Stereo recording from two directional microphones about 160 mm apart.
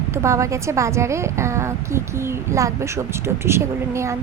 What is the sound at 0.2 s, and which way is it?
Speech, 20° right (ahead or behind).